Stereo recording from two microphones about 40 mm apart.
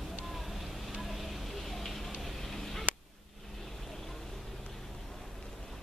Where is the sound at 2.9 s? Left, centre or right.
Right.